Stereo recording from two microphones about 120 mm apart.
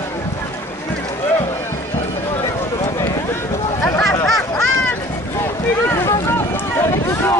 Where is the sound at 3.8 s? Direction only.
25° left (ahead or behind).